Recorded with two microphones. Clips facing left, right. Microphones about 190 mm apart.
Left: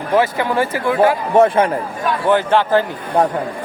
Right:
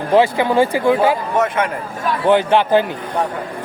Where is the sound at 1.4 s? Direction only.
35° left (ahead or behind).